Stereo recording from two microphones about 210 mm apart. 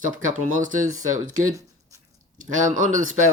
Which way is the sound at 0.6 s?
35° right (ahead or behind).